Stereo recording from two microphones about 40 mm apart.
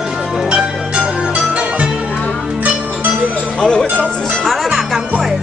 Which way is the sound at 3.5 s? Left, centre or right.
Centre.